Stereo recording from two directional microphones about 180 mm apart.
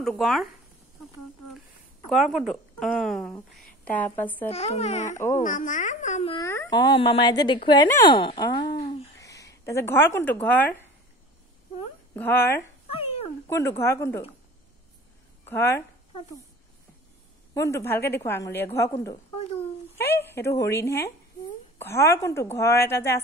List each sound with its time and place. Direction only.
0.0 s speech: centre (ahead or behind)
2.0 s speech: centre (ahead or behind)
4.5 s speech: 35° left (ahead or behind)
5.1 s a woman's voice: 15° left (ahead or behind)
5.4 s a woman's voice: 45° left (ahead or behind)
6.3 s a woman's voice: 15° left (ahead or behind)
6.7 s speech: 25° left (ahead or behind); by 10.8 s 10° left (ahead or behind)
12.1 s a woman's voice: 10° left (ahead or behind)
12.9 s a sound: 35° left (ahead or behind)
13.5 s a woman's voice: 15° left (ahead or behind)
15.4 s speech: 15° left (ahead or behind)
17.6 s a woman's voice: 15° left (ahead or behind)